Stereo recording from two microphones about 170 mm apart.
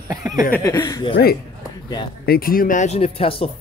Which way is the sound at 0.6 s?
20° left (ahead or behind).